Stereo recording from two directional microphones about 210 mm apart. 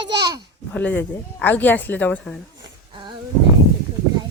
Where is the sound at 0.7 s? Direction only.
5° left (ahead or behind).